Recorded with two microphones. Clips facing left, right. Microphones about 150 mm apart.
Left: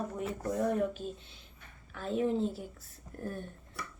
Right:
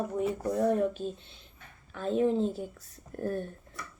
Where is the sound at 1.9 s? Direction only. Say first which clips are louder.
Right 4 dB; 30° right (ahead or behind).